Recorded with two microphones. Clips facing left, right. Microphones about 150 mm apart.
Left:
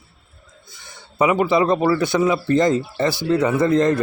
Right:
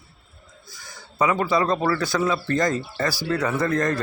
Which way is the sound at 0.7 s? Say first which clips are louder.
Even; 25° left (ahead or behind).